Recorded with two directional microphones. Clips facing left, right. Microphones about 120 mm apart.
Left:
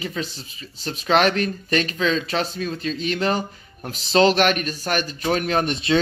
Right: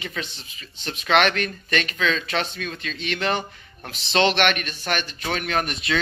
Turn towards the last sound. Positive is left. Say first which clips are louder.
# left 4 dB
turn(degrees=30)  # may be behind; listen again after turning